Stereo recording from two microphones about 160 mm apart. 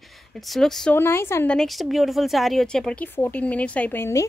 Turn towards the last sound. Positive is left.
turn(degrees=15)  # may be behind; listen again after turning